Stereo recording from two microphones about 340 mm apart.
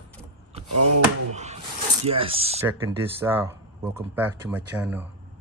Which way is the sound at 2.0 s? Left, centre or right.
Centre.